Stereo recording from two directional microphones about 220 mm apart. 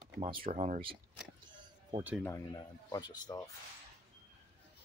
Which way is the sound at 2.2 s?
15° left (ahead or behind).